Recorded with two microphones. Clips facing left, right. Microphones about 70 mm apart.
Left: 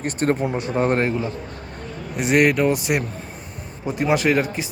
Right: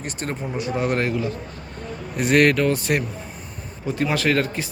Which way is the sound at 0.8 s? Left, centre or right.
Left.